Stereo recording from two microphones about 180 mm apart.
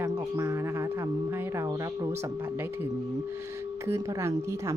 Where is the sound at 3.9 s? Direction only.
15° right (ahead or behind).